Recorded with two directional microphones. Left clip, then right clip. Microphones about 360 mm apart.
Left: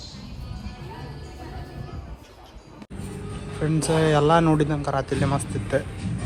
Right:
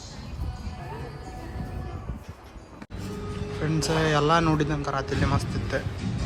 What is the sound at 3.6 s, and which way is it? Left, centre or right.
A man's voice, centre.